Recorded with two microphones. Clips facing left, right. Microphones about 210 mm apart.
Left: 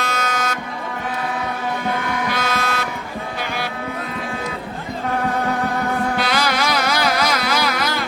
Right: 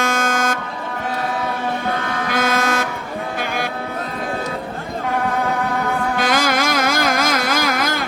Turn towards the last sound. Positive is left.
turn(degrees=-50)  # may be behind; listen again after turning